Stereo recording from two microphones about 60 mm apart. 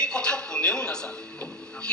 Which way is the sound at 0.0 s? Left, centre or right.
Centre.